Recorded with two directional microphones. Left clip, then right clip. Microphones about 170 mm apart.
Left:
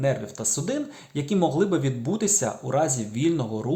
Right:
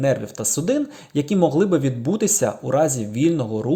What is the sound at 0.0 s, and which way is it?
Speech, 30° right (ahead or behind).